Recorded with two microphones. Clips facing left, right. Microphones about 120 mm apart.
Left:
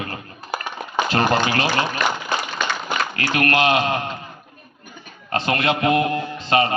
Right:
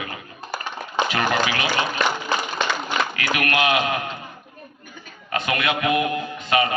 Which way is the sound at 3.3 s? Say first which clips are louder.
Left 3 dB; 30° left (ahead or behind).